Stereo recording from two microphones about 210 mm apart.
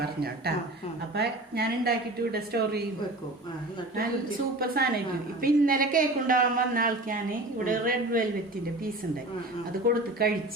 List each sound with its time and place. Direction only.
1.1 s a woman's voice: 50° right (ahead or behind)
4.6 s a woman's voice: 45° right (ahead or behind)
9.8 s a woman's voice: 45° right (ahead or behind)